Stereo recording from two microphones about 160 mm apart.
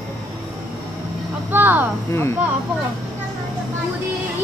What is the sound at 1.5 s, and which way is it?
Speech, 10° right (ahead or behind).